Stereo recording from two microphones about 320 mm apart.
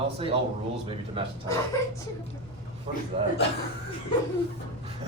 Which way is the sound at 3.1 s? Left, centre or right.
Centre.